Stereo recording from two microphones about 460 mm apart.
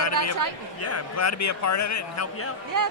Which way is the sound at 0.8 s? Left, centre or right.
Left.